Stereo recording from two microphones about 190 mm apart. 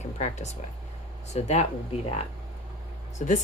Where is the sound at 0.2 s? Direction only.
35° left (ahead or behind).